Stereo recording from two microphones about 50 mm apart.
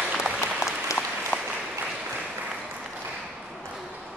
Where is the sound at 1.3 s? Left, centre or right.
Left.